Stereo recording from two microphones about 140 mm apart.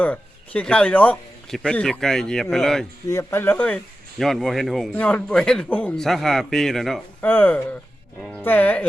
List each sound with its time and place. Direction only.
0.0 s speech: 10° left (ahead or behind)
3.1 s speech: 25° left (ahead or behind)
4.2 s speech: centre (ahead or behind)
7.2 s speech: 15° left (ahead or behind)